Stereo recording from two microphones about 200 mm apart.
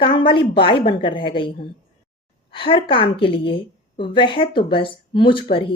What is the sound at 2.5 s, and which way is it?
A woman's voice, 25° left (ahead or behind).